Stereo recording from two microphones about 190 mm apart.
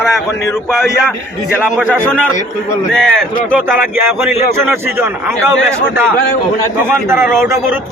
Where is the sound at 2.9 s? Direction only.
5° left (ahead or behind).